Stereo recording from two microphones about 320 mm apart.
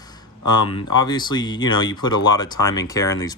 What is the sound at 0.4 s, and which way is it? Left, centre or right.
Speech, centre.